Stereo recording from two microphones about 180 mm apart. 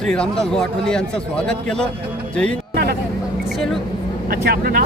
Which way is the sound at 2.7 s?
60° right (ahead or behind).